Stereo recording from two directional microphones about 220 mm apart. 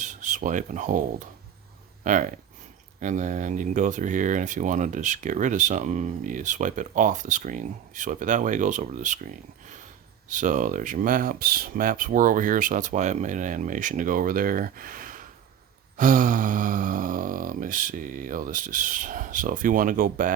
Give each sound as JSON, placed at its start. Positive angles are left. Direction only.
{"t": 0.0, "sound": "speech", "side_deg": -35}
{"t": 2.0, "sound": "speech", "side_deg": -35}